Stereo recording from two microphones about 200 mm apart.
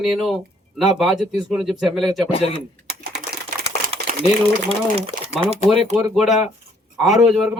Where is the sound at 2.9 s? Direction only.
55° right (ahead or behind).